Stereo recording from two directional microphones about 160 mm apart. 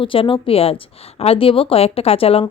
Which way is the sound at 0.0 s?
35° left (ahead or behind).